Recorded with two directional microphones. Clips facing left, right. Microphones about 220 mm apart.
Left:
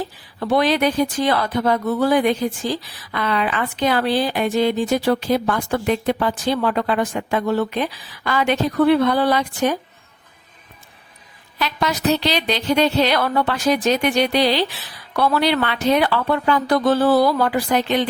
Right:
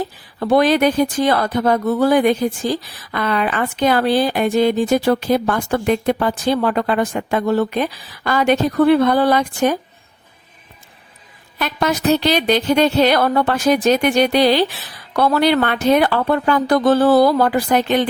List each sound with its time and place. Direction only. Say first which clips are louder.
0.3 s speech: right 4 dB; 45° right (ahead or behind)
11.6 s speech: right 3 dB; 50° right (ahead or behind)